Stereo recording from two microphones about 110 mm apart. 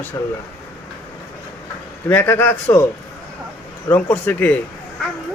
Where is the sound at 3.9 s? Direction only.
15° left (ahead or behind).